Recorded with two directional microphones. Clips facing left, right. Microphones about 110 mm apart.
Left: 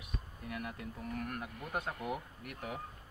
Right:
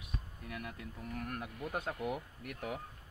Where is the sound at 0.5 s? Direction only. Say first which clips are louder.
Left 3 dB; 40° left (ahead or behind).